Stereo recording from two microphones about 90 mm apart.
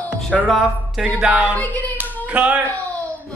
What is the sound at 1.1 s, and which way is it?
Speech, 10° right (ahead or behind).